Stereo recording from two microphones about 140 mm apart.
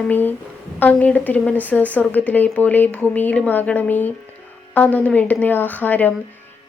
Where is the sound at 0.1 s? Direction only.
15° left (ahead or behind).